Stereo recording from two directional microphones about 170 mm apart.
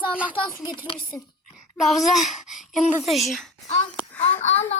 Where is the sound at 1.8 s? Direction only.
Centre (ahead or behind).